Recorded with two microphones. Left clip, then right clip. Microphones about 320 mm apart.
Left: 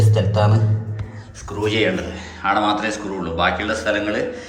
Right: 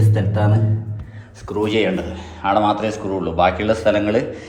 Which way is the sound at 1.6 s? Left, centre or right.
Centre.